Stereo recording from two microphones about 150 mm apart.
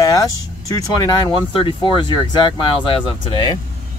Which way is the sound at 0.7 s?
20° left (ahead or behind).